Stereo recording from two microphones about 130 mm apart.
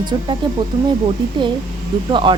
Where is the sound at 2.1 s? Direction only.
35° right (ahead or behind).